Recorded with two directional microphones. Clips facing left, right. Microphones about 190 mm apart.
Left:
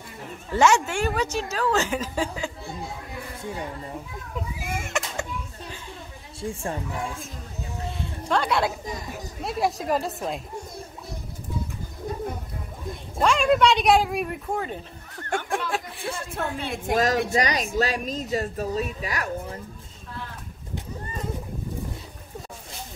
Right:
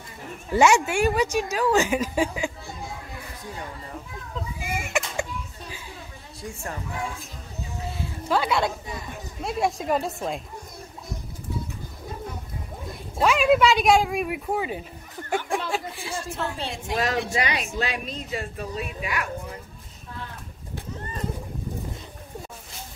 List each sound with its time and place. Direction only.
0.5 s a woman's voice: 10° right (ahead or behind)
3.5 s a child's voice: 20° left (ahead or behind)
4.6 s a sound: 5° right (ahead or behind)
6.4 s a child's voice: 30° left (ahead or behind)
8.0 s a sound: 5° right (ahead or behind)
9.1 s speech: centre (ahead or behind)
13.2 s a woman's voice: 5° right (ahead or behind)
16.1 s a woman's voice: 55° left (ahead or behind); by 19.2 s 40° left (ahead or behind)